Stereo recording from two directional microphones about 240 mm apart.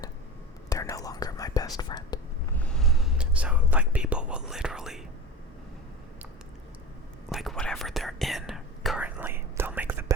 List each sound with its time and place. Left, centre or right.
0.7 s whispering: centre
2.6 s whispering: centre
7.3 s whispering: centre